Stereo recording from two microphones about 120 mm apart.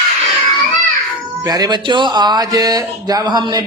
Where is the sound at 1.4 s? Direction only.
30° right (ahead or behind).